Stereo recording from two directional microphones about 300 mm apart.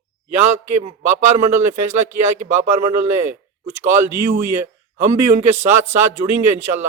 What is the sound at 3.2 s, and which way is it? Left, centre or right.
A man's voice, right.